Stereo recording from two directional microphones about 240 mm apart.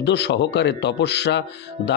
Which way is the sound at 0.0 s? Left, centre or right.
Left.